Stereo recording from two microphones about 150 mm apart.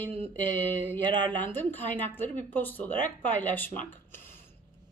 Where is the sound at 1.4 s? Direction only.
10° left (ahead or behind).